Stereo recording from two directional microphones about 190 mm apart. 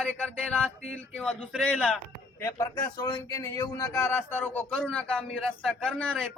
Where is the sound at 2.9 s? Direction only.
20° left (ahead or behind).